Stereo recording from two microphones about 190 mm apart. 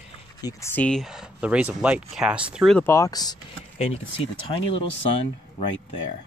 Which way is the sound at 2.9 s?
20° left (ahead or behind).